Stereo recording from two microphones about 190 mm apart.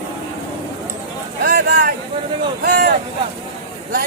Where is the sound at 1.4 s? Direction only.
55° right (ahead or behind).